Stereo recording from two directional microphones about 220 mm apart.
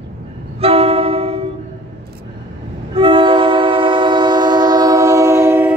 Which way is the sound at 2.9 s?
25° right (ahead or behind).